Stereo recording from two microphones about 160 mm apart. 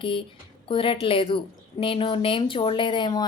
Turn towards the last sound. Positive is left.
turn(degrees=30)  # may be behind; listen again after turning